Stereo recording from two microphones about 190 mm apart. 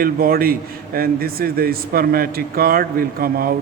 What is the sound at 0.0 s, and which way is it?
A man's voice, 50° right (ahead or behind).